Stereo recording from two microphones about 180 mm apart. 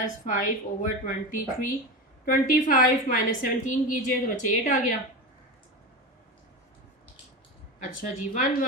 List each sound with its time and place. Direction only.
0.3 s a woman's voice: 45° left (ahead or behind)
7.8 s a woman's voice: 50° left (ahead or behind)